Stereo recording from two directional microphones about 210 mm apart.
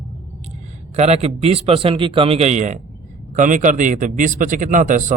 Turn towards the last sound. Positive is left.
turn(degrees=-35)  # may be behind; listen again after turning